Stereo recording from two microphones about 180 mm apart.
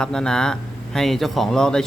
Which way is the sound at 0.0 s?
5° left (ahead or behind).